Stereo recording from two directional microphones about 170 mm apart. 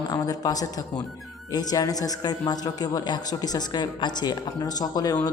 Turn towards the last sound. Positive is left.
turn(degrees=20)  # may be behind; listen again after turning